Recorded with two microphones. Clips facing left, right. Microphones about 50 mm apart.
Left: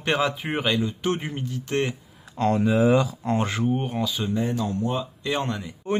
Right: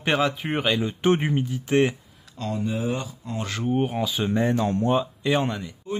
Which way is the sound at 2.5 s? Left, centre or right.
Left.